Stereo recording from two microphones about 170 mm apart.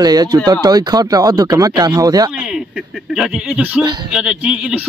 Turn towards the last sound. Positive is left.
turn(degrees=-5)  # may be behind; listen again after turning